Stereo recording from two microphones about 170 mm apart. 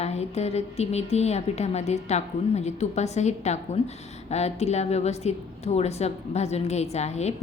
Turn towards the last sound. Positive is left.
turn(degrees=40)  # may be behind; listen again after turning